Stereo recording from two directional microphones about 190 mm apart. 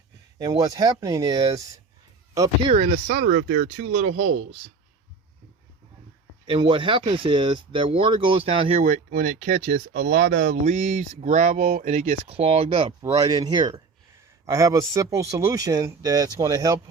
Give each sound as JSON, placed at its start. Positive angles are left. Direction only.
{"t": 0.3, "sound": "speech", "side_deg": -20}
{"t": 6.5, "sound": "speech", "side_deg": -25}
{"t": 8.8, "sound": "speech", "side_deg": -45}